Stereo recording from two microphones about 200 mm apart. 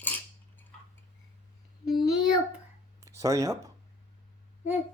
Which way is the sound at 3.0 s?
15° right (ahead or behind).